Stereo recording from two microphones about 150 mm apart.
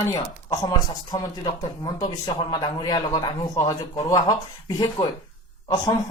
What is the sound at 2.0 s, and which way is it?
A man's voice, 35° left (ahead or behind).